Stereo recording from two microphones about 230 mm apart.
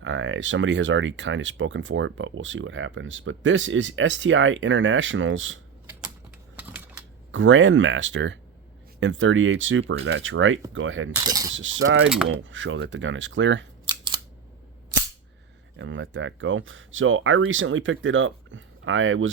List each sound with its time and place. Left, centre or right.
0.0 s speech: right
6.6 s a sound: centre
7.3 s speech: right
11.1 s speech: centre
11.5 s speech: right
12.0 s speech: centre
12.4 s speech: right
13.8 s scissors: centre
15.8 s speech: right